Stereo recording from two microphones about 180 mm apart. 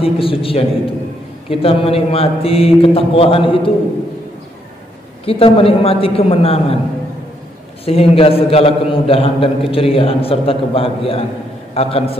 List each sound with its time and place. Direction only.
0.0 s a man's voice: 30° left (ahead or behind)
5.2 s a man's voice: 30° left (ahead or behind)
7.8 s a man's voice: 35° left (ahead or behind)